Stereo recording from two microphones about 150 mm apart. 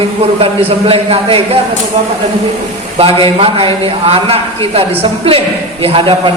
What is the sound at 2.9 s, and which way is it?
A man's voice, 40° right (ahead or behind).